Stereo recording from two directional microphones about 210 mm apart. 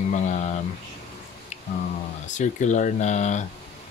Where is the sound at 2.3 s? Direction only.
35° left (ahead or behind).